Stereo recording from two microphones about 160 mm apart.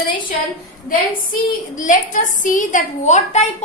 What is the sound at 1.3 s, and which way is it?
A woman's voice, 55° left (ahead or behind).